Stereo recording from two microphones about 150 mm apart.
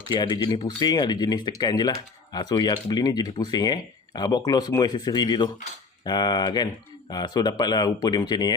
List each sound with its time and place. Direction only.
0.1 s speech: 30° left (ahead or behind)